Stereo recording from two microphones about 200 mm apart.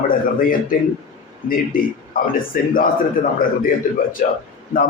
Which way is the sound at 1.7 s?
45° left (ahead or behind).